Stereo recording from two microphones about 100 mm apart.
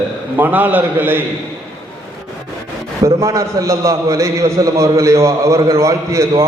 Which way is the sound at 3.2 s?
30° right (ahead or behind).